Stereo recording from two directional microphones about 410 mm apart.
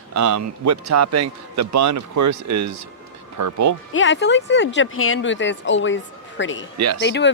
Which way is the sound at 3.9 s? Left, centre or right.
Left.